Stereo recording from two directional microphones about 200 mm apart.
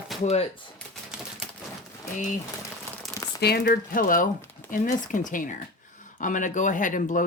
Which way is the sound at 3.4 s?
50° left (ahead or behind).